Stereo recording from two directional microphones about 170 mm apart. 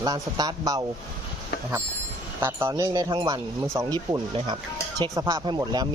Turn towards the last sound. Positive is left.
turn(degrees=-25)  # may be behind; listen again after turning